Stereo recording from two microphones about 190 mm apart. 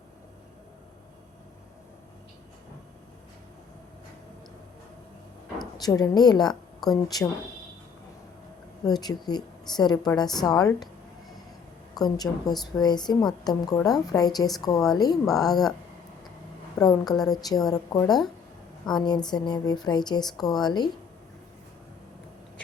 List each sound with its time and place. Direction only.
5.7 s a woman's voice: 20° left (ahead or behind)
8.8 s a woman's voice: 20° left (ahead or behind)
11.9 s a woman's voice: 20° left (ahead or behind)
16.8 s a woman's voice: 20° left (ahead or behind)